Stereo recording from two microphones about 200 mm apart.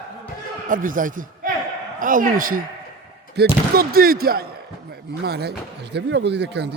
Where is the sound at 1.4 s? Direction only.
40° right (ahead or behind).